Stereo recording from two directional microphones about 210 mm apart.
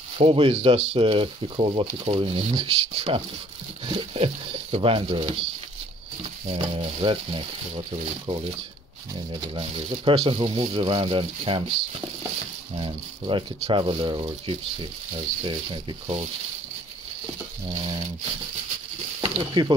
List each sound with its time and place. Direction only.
0.2 s speech: 25° right (ahead or behind)
6.4 s speech: 25° right (ahead or behind)
12.7 s speech: 25° right (ahead or behind)
19.2 s speech: 20° right (ahead or behind)